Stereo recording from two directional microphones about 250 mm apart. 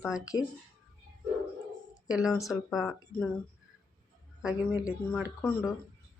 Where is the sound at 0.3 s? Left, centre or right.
Left.